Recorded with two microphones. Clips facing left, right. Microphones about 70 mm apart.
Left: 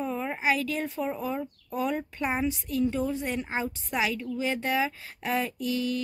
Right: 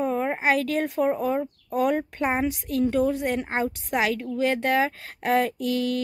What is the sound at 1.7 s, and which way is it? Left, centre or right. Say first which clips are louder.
A woman's voice: right 6 dB; right.